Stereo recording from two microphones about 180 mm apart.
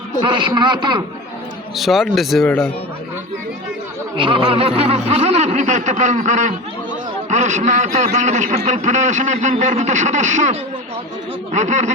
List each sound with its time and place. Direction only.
0.3 s a man's voice: 25° right (ahead or behind)
1.7 s speech: centre (ahead or behind)
4.2 s a man's voice: 30° right (ahead or behind)